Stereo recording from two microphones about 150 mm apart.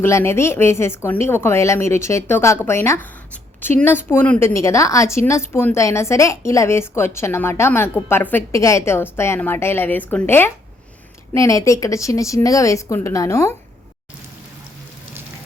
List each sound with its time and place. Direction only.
0.0 s a woman's voice: 15° left (ahead or behind)